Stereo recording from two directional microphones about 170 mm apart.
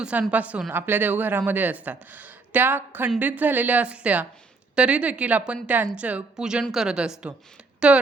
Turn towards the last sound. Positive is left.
turn(degrees=-5)  # may be behind; listen again after turning